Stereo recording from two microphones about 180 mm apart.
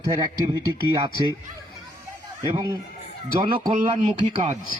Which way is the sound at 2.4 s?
20° right (ahead or behind).